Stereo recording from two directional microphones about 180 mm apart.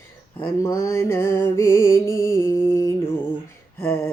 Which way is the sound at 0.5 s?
20° left (ahead or behind).